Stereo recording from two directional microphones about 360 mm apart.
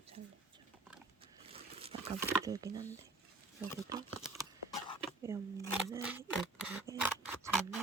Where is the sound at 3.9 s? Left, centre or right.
Centre.